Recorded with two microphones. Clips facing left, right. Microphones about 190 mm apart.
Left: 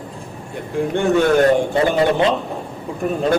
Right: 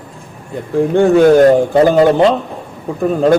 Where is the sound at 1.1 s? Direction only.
40° right (ahead or behind).